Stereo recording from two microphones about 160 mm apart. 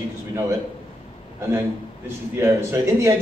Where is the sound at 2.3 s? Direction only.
15° right (ahead or behind).